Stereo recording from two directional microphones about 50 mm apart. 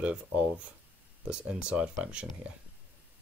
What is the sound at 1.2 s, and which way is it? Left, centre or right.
Speech, centre.